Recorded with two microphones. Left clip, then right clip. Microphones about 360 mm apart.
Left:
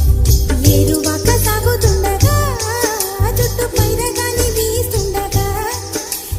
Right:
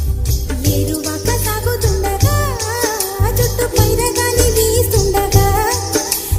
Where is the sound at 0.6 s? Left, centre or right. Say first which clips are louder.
Left 4 dB; left.